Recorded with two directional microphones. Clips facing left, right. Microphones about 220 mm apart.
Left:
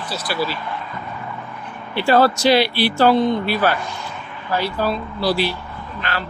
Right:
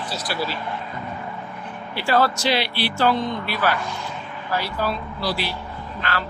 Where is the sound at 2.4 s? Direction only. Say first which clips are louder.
Left 7 dB; 40° left (ahead or behind).